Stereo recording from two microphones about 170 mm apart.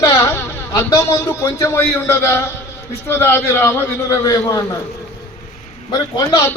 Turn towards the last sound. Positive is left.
turn(degrees=25)  # may be behind; listen again after turning